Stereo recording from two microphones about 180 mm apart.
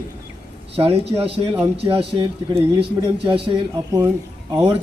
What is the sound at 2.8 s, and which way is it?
Speech, 30° right (ahead or behind).